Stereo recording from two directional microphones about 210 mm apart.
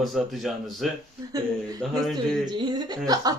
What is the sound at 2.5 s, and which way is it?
Speech, 20° right (ahead or behind).